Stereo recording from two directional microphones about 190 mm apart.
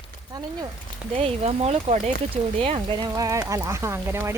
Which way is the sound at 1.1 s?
30° right (ahead or behind).